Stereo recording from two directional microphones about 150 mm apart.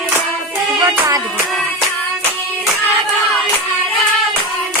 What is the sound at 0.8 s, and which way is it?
Music, 25° right (ahead or behind).